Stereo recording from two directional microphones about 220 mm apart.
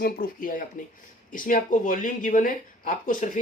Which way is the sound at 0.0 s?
40° left (ahead or behind).